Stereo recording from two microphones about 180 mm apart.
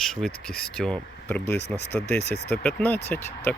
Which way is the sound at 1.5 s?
70° left (ahead or behind).